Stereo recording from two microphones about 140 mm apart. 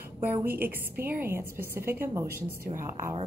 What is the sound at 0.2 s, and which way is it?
A woman's voice, 15° right (ahead or behind).